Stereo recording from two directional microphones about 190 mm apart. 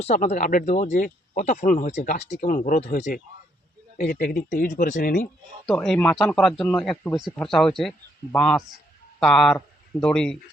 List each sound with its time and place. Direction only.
0.0 s speech: 35° left (ahead or behind)
5.2 s a man's voice: 5° left (ahead or behind)